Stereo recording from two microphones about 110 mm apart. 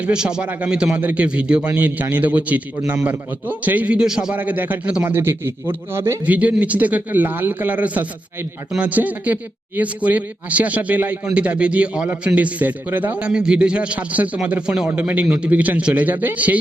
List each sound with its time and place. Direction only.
0.0 s a man's voice: 5° right (ahead or behind)